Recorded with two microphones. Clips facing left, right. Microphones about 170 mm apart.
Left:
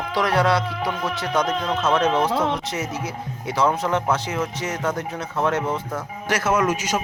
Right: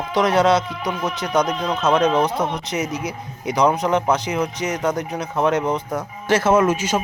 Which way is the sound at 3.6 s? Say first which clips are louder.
Right 3 dB; 15° right (ahead or behind).